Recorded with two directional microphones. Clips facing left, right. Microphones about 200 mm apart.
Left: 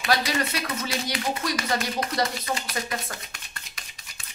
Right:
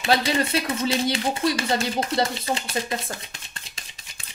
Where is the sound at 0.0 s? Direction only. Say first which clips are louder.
Right 3 dB; 25° right (ahead or behind).